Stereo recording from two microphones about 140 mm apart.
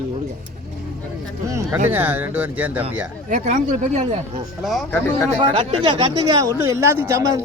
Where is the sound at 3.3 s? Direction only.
60° right (ahead or behind).